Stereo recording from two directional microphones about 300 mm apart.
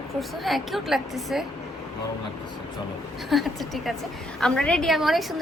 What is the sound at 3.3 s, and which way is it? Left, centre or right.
A woman's voice, centre.